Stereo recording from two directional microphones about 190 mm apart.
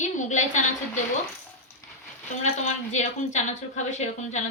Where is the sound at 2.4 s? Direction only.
35° left (ahead or behind).